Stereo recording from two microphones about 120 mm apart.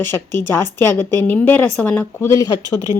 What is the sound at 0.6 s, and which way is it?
Speech, 15° left (ahead or behind).